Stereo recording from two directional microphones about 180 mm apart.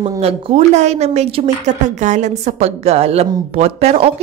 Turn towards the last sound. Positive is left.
turn(degrees=-35)  # may be behind; listen again after turning